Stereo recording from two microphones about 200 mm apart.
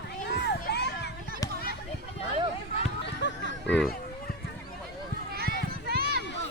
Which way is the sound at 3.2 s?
60° left (ahead or behind).